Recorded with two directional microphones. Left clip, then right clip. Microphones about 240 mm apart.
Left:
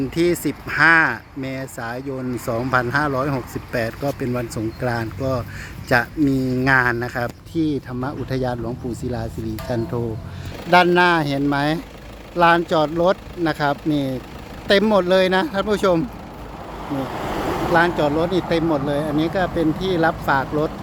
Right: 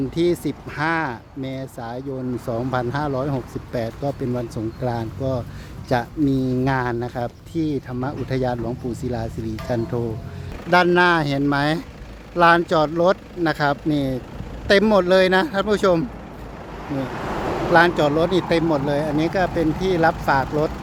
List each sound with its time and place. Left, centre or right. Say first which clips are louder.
0.1 s speech: left 2 dB; centre
17.1 s a sound: left 2 dB; left
17.7 s speech: right 2 dB; centre